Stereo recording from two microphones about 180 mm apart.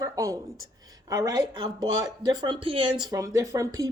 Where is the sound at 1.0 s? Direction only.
20° right (ahead or behind).